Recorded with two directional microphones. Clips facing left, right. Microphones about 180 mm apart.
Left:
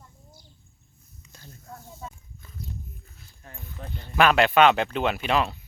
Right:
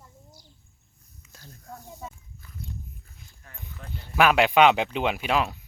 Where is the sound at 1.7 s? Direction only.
15° right (ahead or behind).